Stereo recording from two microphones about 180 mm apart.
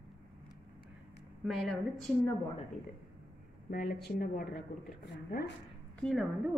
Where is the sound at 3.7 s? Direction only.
60° left (ahead or behind).